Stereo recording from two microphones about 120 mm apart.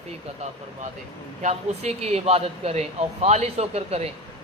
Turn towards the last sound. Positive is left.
turn(degrees=-60)  # may be behind; listen again after turning